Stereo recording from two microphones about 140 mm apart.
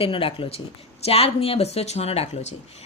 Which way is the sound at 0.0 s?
40° left (ahead or behind).